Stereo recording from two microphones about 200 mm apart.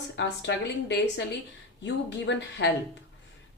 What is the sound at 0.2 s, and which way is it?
A woman's voice, 60° left (ahead or behind).